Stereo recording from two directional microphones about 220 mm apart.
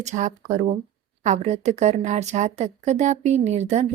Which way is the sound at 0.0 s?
30° right (ahead or behind).